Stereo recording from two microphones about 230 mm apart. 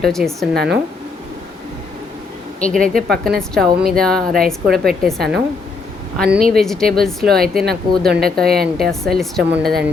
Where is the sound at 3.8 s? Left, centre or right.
Centre.